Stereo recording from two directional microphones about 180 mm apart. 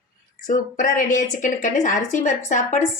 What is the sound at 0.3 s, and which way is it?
A woman's voice, 45° left (ahead or behind).